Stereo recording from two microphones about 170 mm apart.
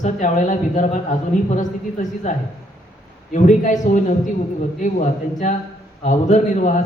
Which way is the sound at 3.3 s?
45° left (ahead or behind).